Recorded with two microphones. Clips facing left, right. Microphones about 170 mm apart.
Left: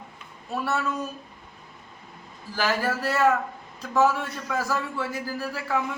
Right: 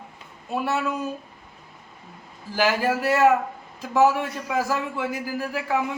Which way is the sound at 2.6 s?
15° right (ahead or behind).